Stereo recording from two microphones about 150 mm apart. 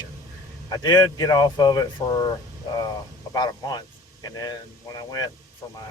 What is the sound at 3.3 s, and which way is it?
Speech, 30° left (ahead or behind).